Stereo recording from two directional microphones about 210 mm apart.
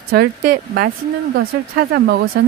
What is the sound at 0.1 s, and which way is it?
Speech, 45° right (ahead or behind).